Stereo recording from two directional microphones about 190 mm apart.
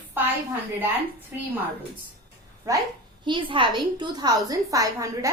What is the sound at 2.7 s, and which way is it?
A woman's voice, 15° right (ahead or behind).